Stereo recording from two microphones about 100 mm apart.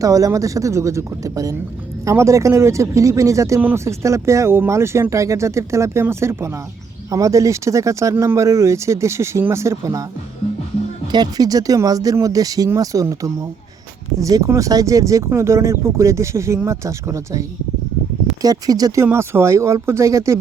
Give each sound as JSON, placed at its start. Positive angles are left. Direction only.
{"t": 0.0, "sound": "speech", "side_deg": -35}
{"t": 11.1, "sound": "speech", "side_deg": -40}
{"t": 18.4, "sound": "speech", "side_deg": -40}